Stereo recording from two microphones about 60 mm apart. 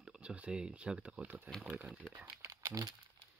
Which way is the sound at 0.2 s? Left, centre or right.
Right.